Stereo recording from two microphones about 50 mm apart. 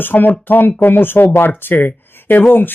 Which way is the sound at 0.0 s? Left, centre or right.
Left.